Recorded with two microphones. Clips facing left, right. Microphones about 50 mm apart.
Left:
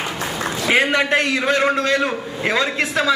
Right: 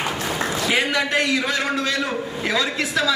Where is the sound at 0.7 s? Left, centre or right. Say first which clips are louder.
Left 6 dB; left.